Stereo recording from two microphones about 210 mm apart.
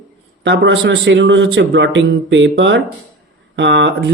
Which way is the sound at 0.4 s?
60° right (ahead or behind).